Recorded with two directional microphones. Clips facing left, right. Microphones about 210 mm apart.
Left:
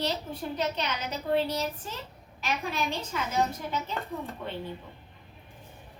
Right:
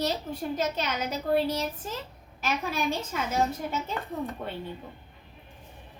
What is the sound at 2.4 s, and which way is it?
Speech, 45° right (ahead or behind).